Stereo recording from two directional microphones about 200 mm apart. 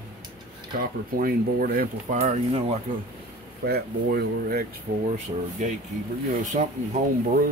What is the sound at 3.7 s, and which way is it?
Speech, 50° right (ahead or behind).